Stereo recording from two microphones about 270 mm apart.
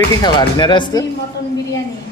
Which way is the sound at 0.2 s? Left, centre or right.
Centre.